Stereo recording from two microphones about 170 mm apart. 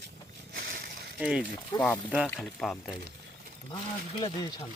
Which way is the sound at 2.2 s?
5° left (ahead or behind).